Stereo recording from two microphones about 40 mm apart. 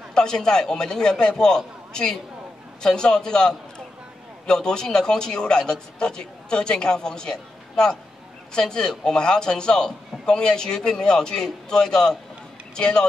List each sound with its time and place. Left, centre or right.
0.1 s a man's voice: centre